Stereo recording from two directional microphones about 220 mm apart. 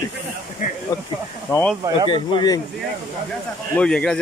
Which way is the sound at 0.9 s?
15° left (ahead or behind).